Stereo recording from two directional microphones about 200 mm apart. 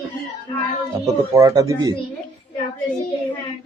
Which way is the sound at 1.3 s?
15° right (ahead or behind).